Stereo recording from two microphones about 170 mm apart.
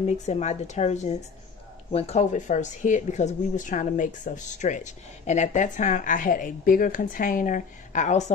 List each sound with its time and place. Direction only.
0.0 s speech: 40° left (ahead or behind)